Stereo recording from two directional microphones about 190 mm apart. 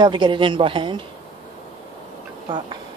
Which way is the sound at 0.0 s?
25° right (ahead or behind).